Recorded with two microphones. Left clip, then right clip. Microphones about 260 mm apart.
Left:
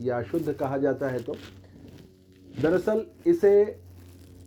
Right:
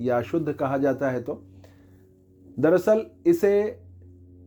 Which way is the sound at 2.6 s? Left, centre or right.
Right.